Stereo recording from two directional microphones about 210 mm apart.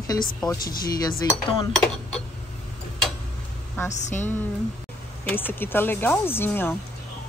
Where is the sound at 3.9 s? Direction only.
35° left (ahead or behind).